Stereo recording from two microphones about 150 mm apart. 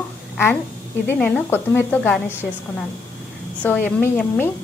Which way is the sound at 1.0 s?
10° left (ahead or behind).